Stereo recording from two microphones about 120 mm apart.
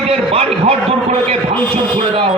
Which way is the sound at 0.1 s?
60° right (ahead or behind).